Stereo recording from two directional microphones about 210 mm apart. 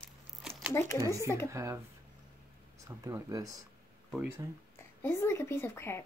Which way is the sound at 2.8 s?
15° right (ahead or behind).